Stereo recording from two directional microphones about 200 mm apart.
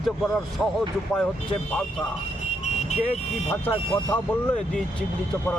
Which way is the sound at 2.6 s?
35° left (ahead or behind).